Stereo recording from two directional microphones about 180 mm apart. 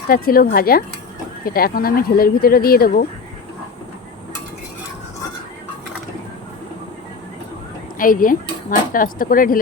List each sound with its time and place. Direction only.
0.1 s speech: 55° left (ahead or behind)
7.9 s speech: 50° left (ahead or behind)